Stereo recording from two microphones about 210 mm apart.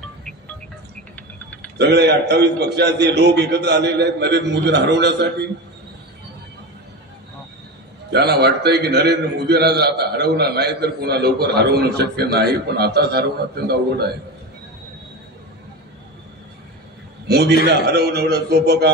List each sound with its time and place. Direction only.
1.1 s a sound: 5° left (ahead or behind)
1.8 s a man's voice: 50° right (ahead or behind)
8.1 s a man's voice: 50° right (ahead or behind)
17.3 s a man's voice: 50° right (ahead or behind)